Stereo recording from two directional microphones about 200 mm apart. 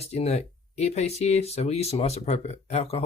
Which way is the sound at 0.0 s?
30° left (ahead or behind).